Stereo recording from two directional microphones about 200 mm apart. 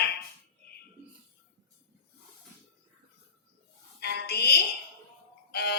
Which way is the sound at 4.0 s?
55° left (ahead or behind).